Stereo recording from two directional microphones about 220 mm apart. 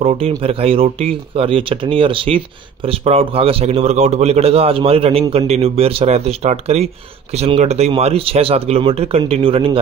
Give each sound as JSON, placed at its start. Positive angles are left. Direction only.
{"t": 0.0, "sound": "speech", "side_deg": -30}